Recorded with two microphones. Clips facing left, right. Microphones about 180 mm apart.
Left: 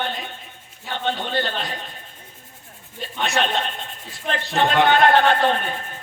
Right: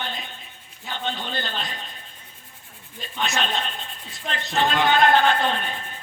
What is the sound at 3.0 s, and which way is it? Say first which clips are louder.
Speech: left 4 dB; 60° left (ahead or behind).